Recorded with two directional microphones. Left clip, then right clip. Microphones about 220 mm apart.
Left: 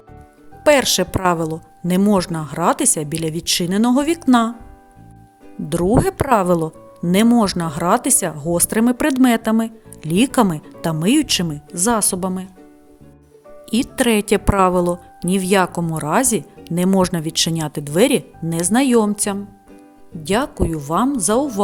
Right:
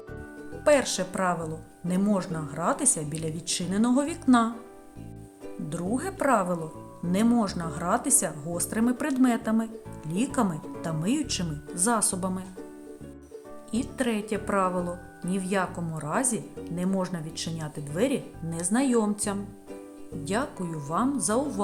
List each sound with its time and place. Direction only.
0.6 s a woman's voice: 40° left (ahead or behind)
5.6 s a woman's voice: 40° left (ahead or behind)
13.7 s a woman's voice: 45° left (ahead or behind)